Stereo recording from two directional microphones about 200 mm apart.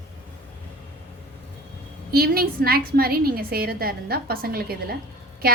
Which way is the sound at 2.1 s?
50° right (ahead or behind).